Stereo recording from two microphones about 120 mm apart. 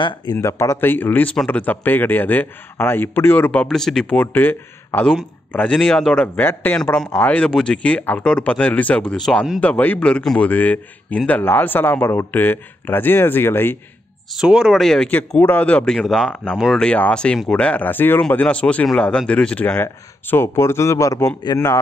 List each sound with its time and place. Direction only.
0.0 s a man's voice: 35° left (ahead or behind); by 3.6 s 15° left (ahead or behind)
3.6 s a man's voice: 5° left (ahead or behind)
9.6 s a man's voice: 15° left (ahead or behind)
14.3 s speech: 5° right (ahead or behind)
16.8 s a man's voice: 10° left (ahead or behind); by 21.7 s 35° left (ahead or behind)